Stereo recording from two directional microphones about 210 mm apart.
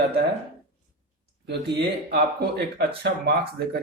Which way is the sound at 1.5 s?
50° right (ahead or behind).